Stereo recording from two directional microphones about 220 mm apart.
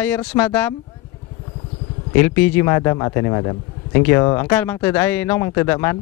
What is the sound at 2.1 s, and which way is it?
Speech, 10° left (ahead or behind).